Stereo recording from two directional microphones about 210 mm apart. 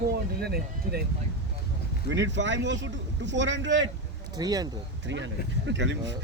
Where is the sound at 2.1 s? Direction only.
60° right (ahead or behind).